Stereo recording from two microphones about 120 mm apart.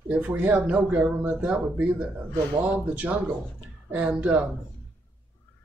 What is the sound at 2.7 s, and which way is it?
A man's voice, 10° right (ahead or behind).